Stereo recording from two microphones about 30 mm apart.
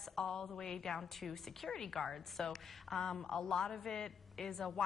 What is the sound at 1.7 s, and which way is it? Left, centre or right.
A woman's voice, centre.